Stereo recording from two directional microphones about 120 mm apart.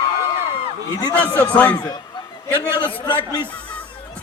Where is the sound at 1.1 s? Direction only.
15° left (ahead or behind).